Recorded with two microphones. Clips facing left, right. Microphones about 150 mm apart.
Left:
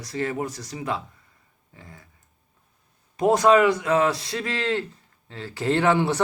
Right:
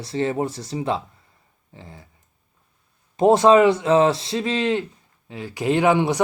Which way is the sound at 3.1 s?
25° right (ahead or behind).